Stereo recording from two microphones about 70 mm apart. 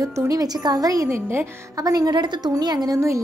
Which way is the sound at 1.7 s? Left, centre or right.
Right.